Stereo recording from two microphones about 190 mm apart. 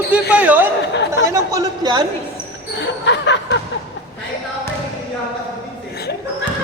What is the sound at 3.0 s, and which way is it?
Laughter, 70° left (ahead or behind).